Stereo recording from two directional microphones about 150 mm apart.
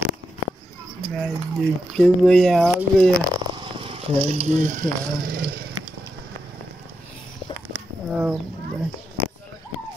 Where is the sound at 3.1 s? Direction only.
25° right (ahead or behind); by 5.4 s 65° right (ahead or behind).